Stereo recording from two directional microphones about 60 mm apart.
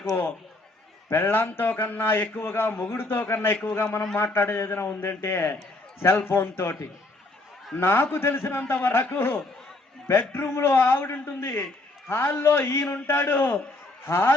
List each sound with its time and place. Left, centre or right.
1.1 s a man's voice: left
7.8 s a man's voice: left